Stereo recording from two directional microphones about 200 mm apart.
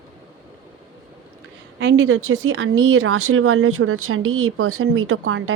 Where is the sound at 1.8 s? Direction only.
75° right (ahead or behind).